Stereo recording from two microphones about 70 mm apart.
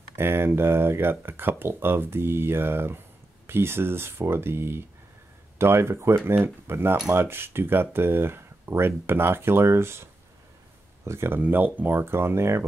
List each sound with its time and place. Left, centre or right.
0.1 s speech: right
11.1 s speech: right